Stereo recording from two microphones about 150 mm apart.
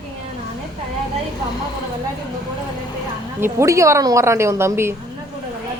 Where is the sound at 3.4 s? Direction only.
20° right (ahead or behind).